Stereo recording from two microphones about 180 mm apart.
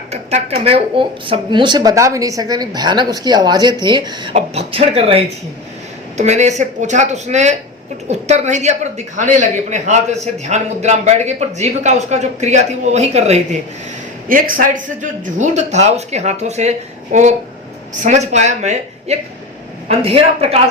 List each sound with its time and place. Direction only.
0.1 s speech: 35° right (ahead or behind)
4.4 s speech: 35° right (ahead or behind)
14.3 s speech: 50° right (ahead or behind); by 20.6 s 35° right (ahead or behind)